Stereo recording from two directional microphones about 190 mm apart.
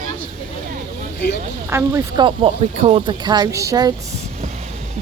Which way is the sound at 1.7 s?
15° right (ahead or behind).